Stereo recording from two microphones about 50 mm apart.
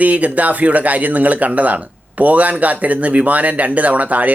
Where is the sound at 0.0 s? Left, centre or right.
Right.